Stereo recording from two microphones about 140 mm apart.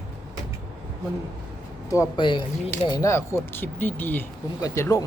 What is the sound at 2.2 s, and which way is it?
Speech, 35° left (ahead or behind).